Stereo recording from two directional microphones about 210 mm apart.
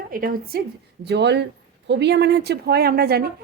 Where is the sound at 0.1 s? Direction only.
45° right (ahead or behind).